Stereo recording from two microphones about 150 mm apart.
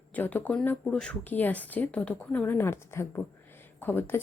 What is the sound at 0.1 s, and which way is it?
Speech, 10° left (ahead or behind).